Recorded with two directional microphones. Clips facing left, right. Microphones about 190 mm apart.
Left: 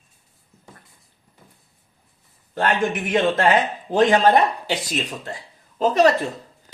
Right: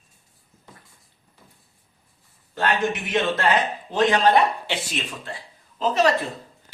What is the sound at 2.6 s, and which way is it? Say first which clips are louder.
Speech: left 2 dB; 50° left (ahead or behind).